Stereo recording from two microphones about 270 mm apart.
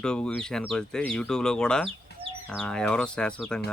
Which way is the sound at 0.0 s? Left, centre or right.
Centre.